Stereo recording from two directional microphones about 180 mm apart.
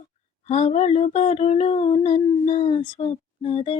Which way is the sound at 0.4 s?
35° left (ahead or behind).